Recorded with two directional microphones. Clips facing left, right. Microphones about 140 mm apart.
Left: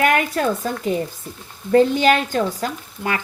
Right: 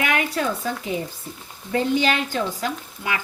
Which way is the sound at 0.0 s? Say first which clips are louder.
Left 5 dB; 45° left (ahead or behind).